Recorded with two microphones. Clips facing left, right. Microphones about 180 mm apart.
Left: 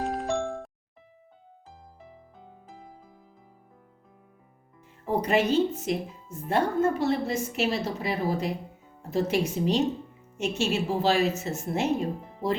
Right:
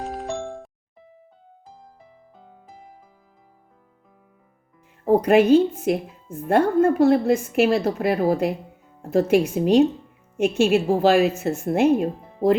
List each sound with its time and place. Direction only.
0.0 s music: centre (ahead or behind)
5.0 s a woman's voice: 55° right (ahead or behind)